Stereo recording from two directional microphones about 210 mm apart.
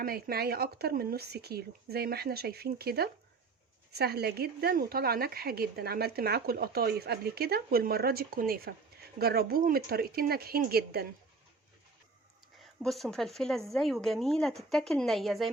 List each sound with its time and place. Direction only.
0.0 s speech: 45° right (ahead or behind)
12.8 s speech: centre (ahead or behind)